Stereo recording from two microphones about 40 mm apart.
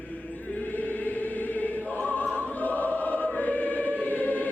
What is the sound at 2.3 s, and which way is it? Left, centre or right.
Choir, left.